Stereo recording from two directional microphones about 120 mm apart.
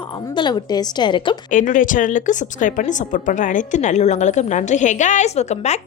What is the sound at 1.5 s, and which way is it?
A woman's voice, 90° left.